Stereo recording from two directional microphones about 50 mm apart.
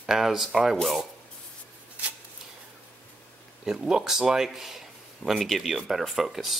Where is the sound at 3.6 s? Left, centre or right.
Centre.